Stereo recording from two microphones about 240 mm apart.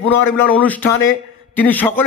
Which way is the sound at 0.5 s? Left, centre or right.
Centre.